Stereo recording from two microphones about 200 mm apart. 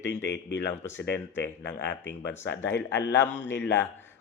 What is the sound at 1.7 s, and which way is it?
Speech, 60° left (ahead or behind).